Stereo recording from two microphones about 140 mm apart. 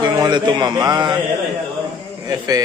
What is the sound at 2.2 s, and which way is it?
Speech, 30° right (ahead or behind).